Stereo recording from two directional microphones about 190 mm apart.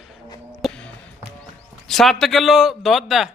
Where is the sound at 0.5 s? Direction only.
Centre (ahead or behind).